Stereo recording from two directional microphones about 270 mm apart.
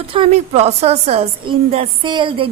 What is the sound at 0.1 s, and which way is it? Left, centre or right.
A woman's voice, right.